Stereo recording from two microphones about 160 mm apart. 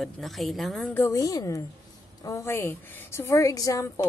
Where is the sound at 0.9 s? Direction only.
20° left (ahead or behind).